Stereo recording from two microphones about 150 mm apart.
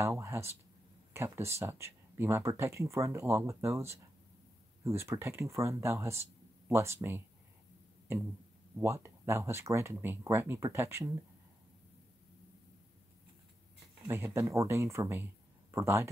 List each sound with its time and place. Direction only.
0.0 s speech: 20° right (ahead or behind)
8.7 s speech: 20° right (ahead or behind)
14.0 s speech: 15° right (ahead or behind)